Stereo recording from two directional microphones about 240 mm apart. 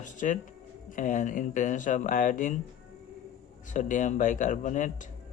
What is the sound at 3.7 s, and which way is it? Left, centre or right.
Speech, left.